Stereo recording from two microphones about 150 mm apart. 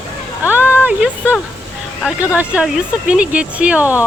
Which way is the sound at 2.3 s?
10° right (ahead or behind).